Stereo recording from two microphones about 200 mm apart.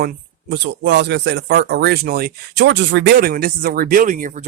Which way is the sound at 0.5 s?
60° right (ahead or behind).